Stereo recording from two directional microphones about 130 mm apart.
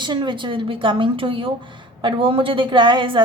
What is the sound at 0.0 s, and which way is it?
Speech, 35° right (ahead or behind).